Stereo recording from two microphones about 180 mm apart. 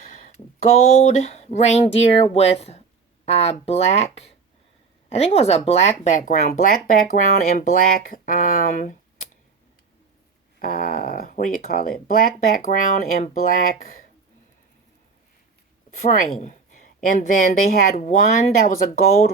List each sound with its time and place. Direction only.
0.0 s a sound: 45° left (ahead or behind)
0.8 s speech: 40° left (ahead or behind)
10.6 s speech: 50° left (ahead or behind)
16.0 s speech: 45° left (ahead or behind)